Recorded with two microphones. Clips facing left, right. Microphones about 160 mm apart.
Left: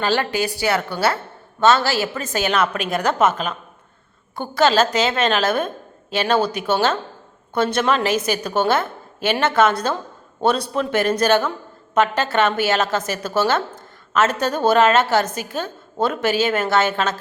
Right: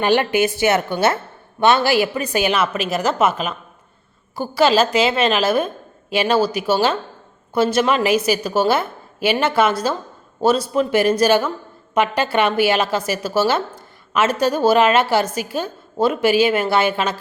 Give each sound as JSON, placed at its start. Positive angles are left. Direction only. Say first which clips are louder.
{"t": 0.0, "sound": "a woman's voice", "louder": "right 4 dB", "side_deg": -15}